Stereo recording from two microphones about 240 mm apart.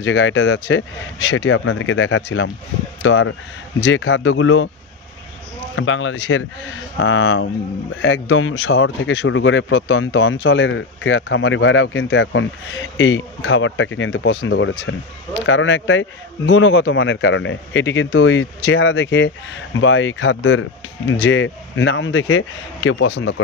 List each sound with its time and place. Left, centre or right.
0.0 s a man's voice: left
5.8 s a man's voice: left